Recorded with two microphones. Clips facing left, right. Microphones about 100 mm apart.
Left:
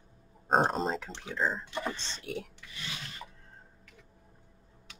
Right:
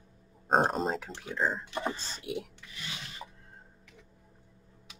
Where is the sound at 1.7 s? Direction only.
25° right (ahead or behind).